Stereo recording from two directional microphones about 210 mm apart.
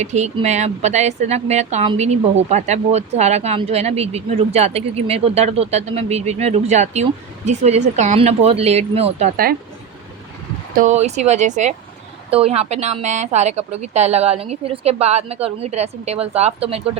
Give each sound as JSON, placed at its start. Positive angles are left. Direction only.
{"t": 0.0, "sound": "speech", "side_deg": -30}
{"t": 10.8, "sound": "speech", "side_deg": -35}